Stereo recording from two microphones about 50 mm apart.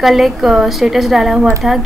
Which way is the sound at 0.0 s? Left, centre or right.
Centre.